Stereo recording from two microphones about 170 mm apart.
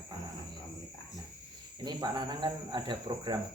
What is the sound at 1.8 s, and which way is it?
Cricket, 25° right (ahead or behind).